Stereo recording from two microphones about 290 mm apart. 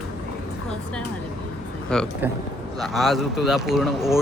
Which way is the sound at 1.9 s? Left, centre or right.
Centre.